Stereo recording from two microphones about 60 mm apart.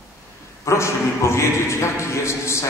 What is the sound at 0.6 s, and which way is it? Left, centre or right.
A man's voice, left.